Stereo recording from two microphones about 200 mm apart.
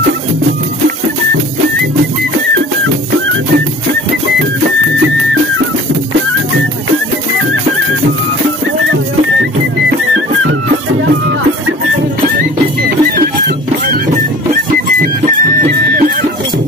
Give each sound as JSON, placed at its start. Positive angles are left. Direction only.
{"t": 14.5, "sound": "music", "side_deg": -45}